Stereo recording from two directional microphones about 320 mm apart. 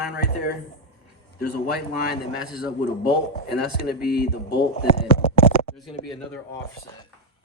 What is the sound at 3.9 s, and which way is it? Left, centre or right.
Speech, left.